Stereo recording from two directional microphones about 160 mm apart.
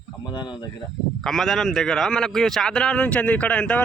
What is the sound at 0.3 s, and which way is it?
Speech, 30° left (ahead or behind).